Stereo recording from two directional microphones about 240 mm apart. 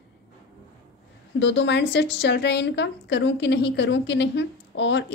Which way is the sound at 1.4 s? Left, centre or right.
Left.